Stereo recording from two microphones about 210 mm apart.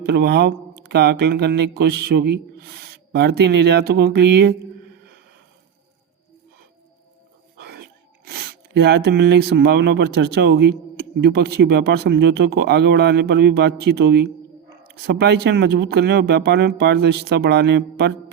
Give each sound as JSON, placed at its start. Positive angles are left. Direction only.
{"t": 0.0, "sound": "a man's voice", "side_deg": -50}
{"t": 7.6, "sound": "a man's voice", "side_deg": -50}